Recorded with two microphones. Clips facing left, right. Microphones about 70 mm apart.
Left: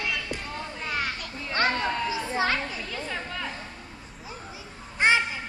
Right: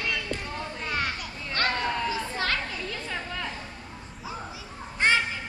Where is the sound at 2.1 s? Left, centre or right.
Centre.